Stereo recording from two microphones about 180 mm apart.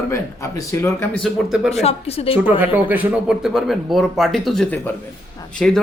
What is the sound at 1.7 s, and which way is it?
Speech, 35° left (ahead or behind).